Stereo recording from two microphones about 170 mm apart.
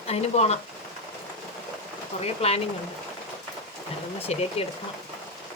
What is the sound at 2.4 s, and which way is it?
Speech, 35° left (ahead or behind).